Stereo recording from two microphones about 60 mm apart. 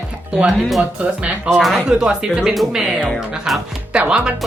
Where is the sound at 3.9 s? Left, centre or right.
Right.